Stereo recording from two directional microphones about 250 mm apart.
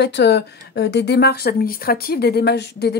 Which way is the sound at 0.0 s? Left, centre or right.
Left.